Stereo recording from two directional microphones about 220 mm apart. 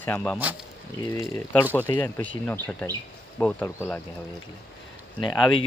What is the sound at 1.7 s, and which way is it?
Speech, 10° left (ahead or behind).